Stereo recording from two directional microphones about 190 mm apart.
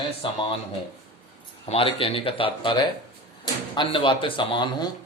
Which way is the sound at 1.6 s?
30° left (ahead or behind).